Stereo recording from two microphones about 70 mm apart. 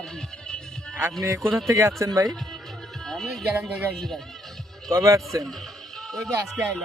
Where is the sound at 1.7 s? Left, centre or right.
Right.